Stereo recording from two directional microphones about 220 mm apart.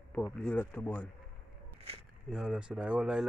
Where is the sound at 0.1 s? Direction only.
5° left (ahead or behind).